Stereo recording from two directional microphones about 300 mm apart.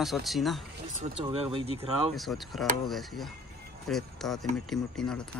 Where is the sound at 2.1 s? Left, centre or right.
Centre.